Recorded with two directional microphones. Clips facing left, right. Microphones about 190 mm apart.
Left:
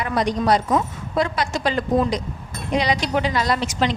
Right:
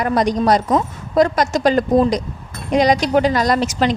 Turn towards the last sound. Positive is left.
turn(degrees=-45)  # may be behind; listen again after turning